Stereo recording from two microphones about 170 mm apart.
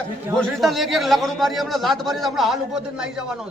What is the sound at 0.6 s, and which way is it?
A man's voice, centre (ahead or behind).